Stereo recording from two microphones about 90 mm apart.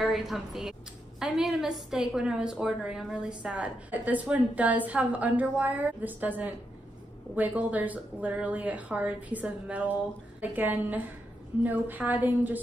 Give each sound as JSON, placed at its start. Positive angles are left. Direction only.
{"t": 0.0, "sound": "a woman's voice", "side_deg": 0}